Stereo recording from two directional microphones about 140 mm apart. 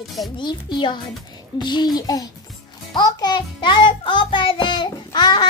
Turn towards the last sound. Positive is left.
turn(degrees=30)  # may be behind; listen again after turning